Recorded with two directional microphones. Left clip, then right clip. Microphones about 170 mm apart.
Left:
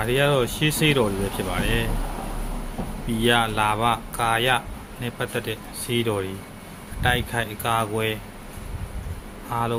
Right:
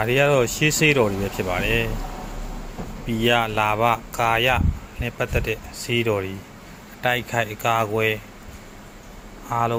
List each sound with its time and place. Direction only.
0.0 s speech: 30° right (ahead or behind)
3.1 s speech: 25° right (ahead or behind)
9.5 s speech: 25° right (ahead or behind)